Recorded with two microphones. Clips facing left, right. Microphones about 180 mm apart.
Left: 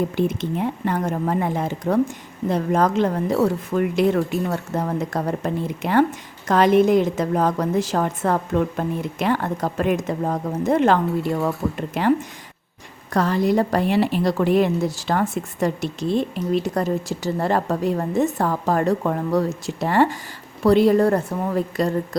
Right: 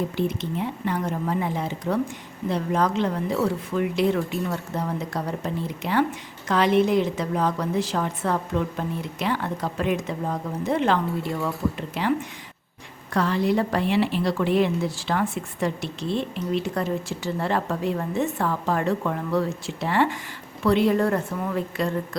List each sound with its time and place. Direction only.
0.2 s speech: 50° left (ahead or behind)
13.1 s a woman's voice: 40° left (ahead or behind)